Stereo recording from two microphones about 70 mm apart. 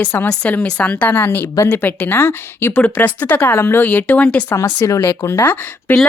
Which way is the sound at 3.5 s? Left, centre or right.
Left.